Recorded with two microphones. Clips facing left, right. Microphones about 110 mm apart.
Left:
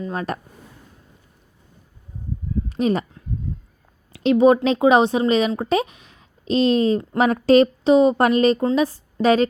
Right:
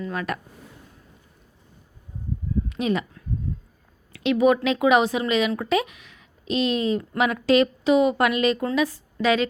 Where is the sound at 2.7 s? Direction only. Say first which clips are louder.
Left 6 dB; 35° left (ahead or behind).